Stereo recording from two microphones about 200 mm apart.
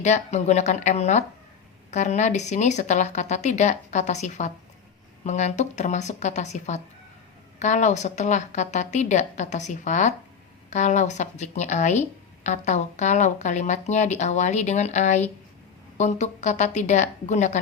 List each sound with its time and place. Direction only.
0.0 s speech: 35° left (ahead or behind)